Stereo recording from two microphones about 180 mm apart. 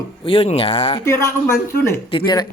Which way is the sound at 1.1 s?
15° left (ahead or behind).